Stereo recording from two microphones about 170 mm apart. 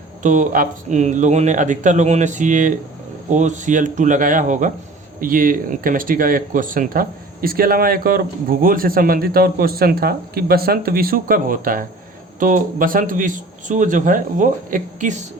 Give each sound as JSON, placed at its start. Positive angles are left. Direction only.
{"t": 0.2, "sound": "speech", "side_deg": -50}